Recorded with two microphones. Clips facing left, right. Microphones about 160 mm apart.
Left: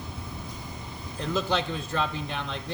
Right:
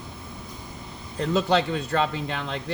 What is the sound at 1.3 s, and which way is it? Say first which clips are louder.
A man's voice: right 5 dB; 80° right.